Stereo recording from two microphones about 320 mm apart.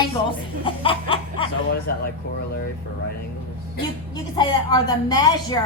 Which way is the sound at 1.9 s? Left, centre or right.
Left.